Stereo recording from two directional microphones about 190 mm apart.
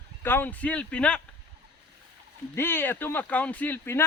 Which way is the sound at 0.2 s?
10° left (ahead or behind).